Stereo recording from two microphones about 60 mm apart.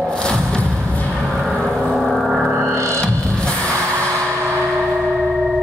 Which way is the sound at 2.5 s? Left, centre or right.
Right.